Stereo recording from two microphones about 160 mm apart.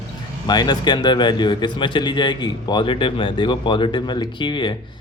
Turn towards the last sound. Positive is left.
turn(degrees=30)  # may be behind; listen again after turning